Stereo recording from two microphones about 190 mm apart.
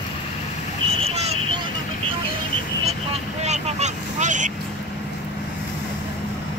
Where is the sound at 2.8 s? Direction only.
35° right (ahead or behind).